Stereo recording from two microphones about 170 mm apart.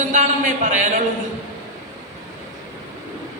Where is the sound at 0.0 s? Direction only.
45° right (ahead or behind).